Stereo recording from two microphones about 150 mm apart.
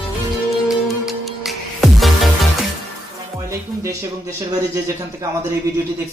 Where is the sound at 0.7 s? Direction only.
Centre (ahead or behind).